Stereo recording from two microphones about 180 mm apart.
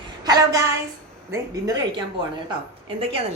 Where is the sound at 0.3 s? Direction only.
20° right (ahead or behind).